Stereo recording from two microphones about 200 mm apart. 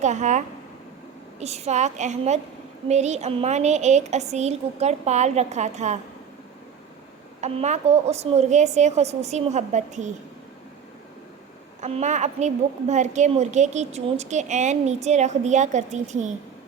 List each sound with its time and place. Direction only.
0.0 s a woman's voice: 35° right (ahead or behind)
7.4 s a woman's voice: 35° right (ahead or behind)
11.8 s a woman's voice: 35° right (ahead or behind)